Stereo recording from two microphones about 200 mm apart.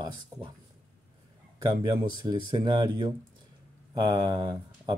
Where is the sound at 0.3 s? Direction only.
15° right (ahead or behind).